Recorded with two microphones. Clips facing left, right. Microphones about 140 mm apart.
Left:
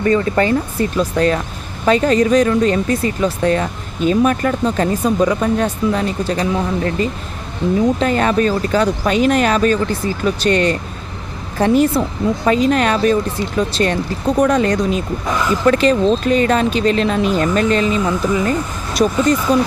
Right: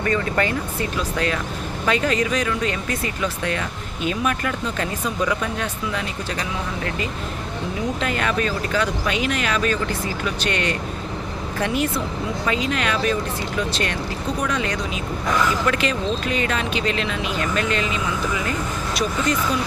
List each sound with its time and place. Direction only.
0.0 s speech: 30° left (ahead or behind)